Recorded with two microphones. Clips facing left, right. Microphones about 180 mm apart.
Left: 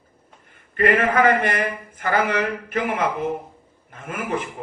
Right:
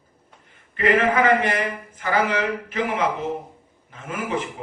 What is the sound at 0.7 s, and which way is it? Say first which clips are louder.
A man's voice: even; 55° left (ahead or behind).